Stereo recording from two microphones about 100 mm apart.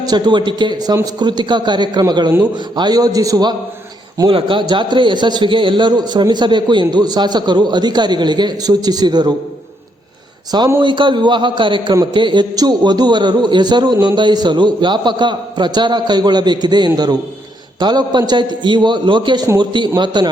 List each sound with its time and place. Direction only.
0.0 s a man's voice: 45° right (ahead or behind)
4.3 s a man's voice: 60° right (ahead or behind); by 9.3 s 45° right (ahead or behind)
10.8 s a man's voice: 55° right (ahead or behind)